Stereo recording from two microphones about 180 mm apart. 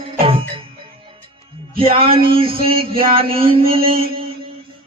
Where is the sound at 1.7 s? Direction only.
30° right (ahead or behind).